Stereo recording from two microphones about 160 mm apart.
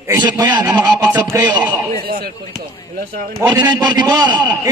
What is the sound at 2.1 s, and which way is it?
Speech, 75° right (ahead or behind).